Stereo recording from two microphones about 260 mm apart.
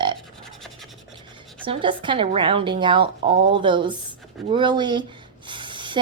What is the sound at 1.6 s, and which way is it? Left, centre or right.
Speech, centre.